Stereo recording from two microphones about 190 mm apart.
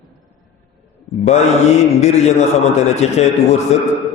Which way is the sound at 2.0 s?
35° left (ahead or behind).